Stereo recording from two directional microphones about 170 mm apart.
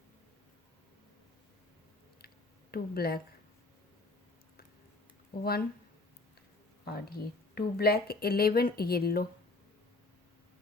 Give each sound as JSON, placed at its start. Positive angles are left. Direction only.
{"t": 2.7, "sound": "speech", "side_deg": 65}
{"t": 5.4, "sound": "speech", "side_deg": 65}
{"t": 6.8, "sound": "speech", "side_deg": 65}